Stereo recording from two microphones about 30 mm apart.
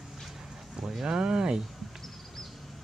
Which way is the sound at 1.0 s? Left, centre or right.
Right.